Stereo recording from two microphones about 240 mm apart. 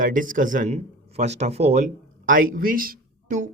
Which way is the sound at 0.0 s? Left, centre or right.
Right.